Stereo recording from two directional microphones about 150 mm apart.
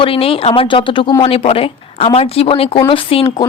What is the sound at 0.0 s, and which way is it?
Speech, 40° left (ahead or behind).